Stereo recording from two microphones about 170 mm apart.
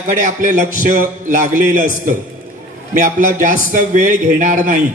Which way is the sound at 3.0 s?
50° right (ahead or behind).